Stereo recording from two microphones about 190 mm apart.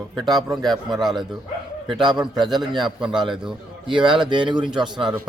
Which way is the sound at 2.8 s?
5° right (ahead or behind).